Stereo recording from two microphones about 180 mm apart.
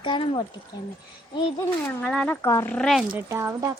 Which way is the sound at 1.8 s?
10° left (ahead or behind).